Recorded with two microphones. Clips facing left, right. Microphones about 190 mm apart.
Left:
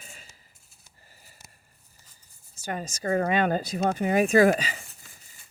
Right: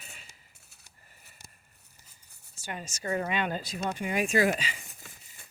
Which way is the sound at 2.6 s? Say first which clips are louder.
Left 7 dB; 40° left (ahead or behind).